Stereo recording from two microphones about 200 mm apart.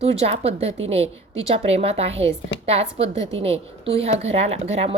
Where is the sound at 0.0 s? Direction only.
30° right (ahead or behind).